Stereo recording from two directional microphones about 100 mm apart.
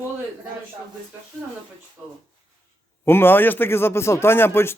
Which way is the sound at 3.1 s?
20° left (ahead or behind).